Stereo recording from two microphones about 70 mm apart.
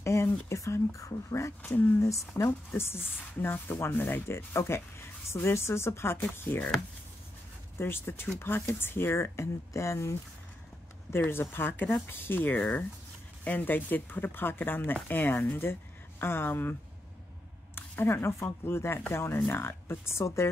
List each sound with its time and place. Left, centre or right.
0.0 s a woman's voice: left
7.7 s a woman's voice: left
17.7 s a woman's voice: left